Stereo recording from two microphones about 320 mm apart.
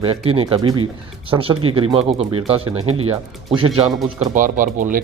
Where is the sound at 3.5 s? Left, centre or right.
Centre.